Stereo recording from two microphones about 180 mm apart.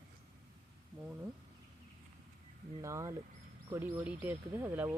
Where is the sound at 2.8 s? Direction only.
15° right (ahead or behind).